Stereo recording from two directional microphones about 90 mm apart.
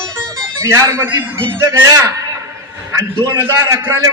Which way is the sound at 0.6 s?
35° right (ahead or behind).